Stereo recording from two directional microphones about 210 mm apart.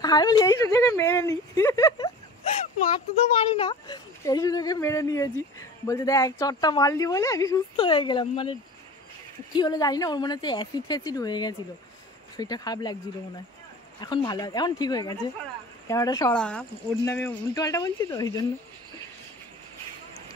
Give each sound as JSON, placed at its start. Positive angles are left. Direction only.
{"t": 0.0, "sound": "speech", "side_deg": 20}
{"t": 3.5, "sound": "speech", "side_deg": 20}
{"t": 14.0, "sound": "speech", "side_deg": 20}
{"t": 16.3, "sound": "speech", "side_deg": 5}